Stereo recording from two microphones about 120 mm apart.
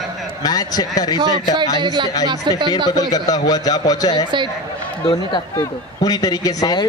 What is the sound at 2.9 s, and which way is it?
Speech, 30° left (ahead or behind).